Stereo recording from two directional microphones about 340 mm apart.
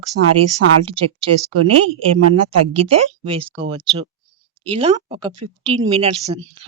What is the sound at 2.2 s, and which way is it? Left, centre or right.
Speech, right.